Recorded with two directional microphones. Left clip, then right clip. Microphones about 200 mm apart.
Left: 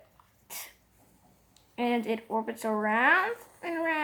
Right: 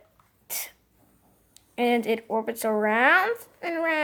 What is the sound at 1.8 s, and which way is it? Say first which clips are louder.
Speech: right 6 dB; 50° right (ahead or behind).